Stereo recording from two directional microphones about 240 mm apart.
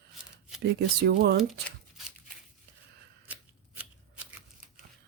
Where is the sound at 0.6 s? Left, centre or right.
Right.